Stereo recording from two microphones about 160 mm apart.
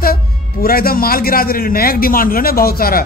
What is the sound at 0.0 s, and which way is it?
A man's voice, 70° left (ahead or behind).